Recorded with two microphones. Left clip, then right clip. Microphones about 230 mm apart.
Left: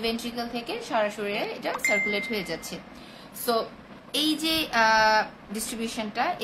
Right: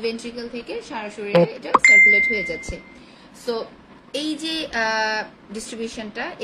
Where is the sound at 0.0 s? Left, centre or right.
Centre.